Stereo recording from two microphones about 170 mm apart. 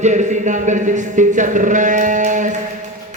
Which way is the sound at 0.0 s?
45° right (ahead or behind).